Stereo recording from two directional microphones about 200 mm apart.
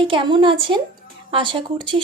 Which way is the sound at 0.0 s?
25° right (ahead or behind).